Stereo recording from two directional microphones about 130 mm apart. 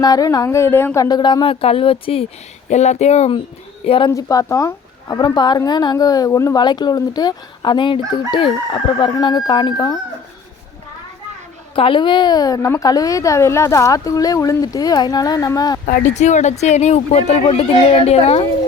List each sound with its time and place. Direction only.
0.0 s a woman's voice: 30° left (ahead or behind)
1.0 s speech: 35° left (ahead or behind)
2.6 s speech: 60° left (ahead or behind); by 4.1 s 45° left (ahead or behind)
4.1 s speech: 25° left (ahead or behind)
11.7 s a woman's voice: 40° left (ahead or behind)
15.9 s speech: 65° left (ahead or behind)